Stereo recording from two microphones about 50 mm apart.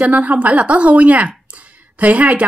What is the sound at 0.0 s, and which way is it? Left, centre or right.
A woman's voice, right.